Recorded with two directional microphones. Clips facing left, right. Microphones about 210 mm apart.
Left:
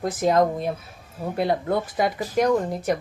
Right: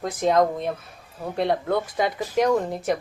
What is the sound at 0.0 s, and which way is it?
Speech, centre (ahead or behind).